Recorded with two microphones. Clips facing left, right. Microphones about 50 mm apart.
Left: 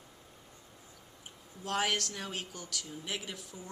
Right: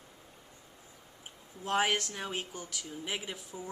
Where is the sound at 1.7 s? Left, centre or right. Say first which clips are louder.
Right 3 dB; right.